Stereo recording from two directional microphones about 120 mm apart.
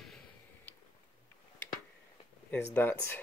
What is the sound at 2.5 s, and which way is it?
Speech, 15° left (ahead or behind).